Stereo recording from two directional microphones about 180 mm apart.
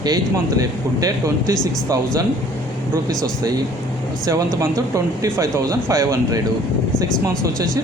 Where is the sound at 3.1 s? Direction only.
20° right (ahead or behind).